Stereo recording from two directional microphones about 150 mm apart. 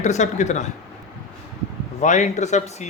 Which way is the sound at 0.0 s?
50° left (ahead or behind).